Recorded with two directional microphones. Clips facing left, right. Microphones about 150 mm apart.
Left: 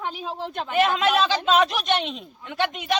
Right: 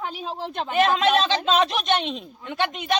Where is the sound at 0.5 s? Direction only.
30° right (ahead or behind).